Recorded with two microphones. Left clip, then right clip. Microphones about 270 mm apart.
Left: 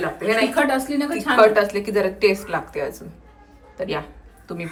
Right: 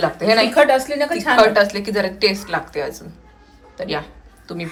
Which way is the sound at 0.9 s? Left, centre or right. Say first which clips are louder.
Right 4 dB; right.